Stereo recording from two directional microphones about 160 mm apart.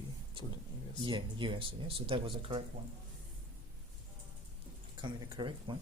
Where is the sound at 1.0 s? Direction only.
30° right (ahead or behind).